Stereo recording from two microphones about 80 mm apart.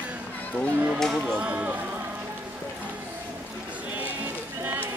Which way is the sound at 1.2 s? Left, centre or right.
Centre.